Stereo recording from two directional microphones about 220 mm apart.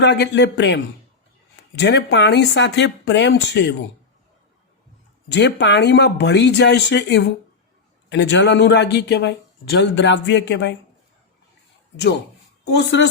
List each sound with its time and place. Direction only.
0.0 s speech: 50° left (ahead or behind)
1.8 s speech: 50° left (ahead or behind)
5.3 s speech: 50° left (ahead or behind)
12.6 s speech: 50° left (ahead or behind)